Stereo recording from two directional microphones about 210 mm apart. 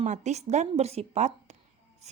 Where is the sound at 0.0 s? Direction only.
35° right (ahead or behind).